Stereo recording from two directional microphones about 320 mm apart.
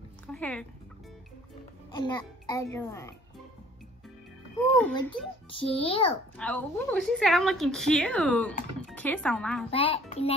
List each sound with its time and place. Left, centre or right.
0.3 s speech: centre
1.9 s a child's voice: centre
4.7 s a woman's voice: centre
5.5 s a child's voice: centre
6.3 s a woman's voice: centre
9.7 s a child's voice: centre